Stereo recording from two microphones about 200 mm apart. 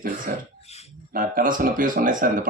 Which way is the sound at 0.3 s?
45° right (ahead or behind).